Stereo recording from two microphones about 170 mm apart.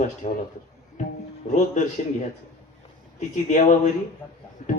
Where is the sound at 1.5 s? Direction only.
45° left (ahead or behind).